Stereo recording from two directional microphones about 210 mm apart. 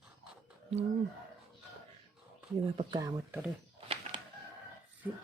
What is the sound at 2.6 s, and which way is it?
Speech, 25° right (ahead or behind).